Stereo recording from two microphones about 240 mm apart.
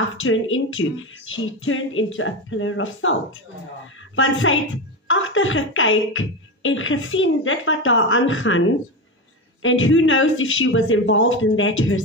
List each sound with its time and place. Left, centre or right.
0.2 s speech: left